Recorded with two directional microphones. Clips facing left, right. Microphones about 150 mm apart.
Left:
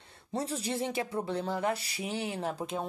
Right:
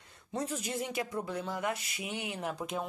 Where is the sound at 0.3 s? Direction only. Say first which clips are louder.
Left 2 dB; 30° left (ahead or behind).